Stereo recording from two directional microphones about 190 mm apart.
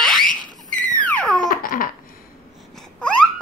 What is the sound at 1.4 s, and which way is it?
Babbling, 50° left (ahead or behind).